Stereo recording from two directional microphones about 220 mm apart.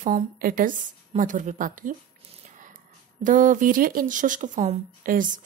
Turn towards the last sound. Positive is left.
turn(degrees=-40)  # may be behind; listen again after turning